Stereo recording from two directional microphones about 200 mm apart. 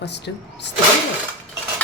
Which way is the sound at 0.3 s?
60° left (ahead or behind).